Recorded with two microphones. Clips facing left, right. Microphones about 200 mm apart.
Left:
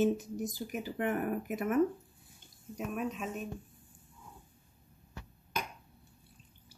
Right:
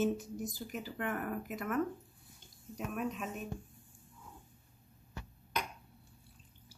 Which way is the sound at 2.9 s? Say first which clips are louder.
Left 2 dB; centre (ahead or behind).